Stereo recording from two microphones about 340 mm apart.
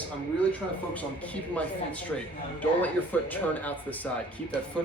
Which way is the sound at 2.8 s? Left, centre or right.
Centre.